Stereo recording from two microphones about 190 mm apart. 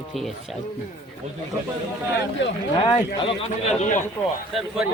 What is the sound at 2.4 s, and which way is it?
Speech, 75° left (ahead or behind).